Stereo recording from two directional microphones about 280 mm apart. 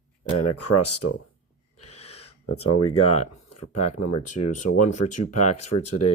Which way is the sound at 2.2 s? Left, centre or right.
Left.